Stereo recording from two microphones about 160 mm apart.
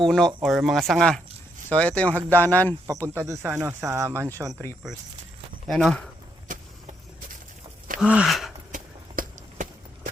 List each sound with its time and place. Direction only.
0.0 s speech: 5° left (ahead or behind)
3.2 s speech: 15° right (ahead or behind)
5.6 s speech: centre (ahead or behind)
7.9 s gasp: 5° right (ahead or behind)
8.7 s walk: 55° right (ahead or behind)